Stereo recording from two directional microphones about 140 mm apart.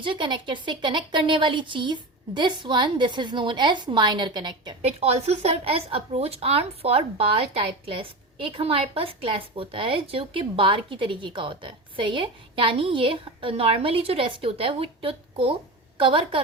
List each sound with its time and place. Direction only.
0.0 s a woman's voice: 35° right (ahead or behind)
4.8 s a woman's voice: 50° right (ahead or behind)